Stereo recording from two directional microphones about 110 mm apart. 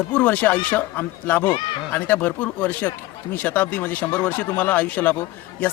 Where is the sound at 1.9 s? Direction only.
15° left (ahead or behind).